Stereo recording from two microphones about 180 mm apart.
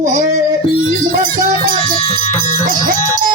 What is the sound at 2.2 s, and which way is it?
Music, 45° left (ahead or behind).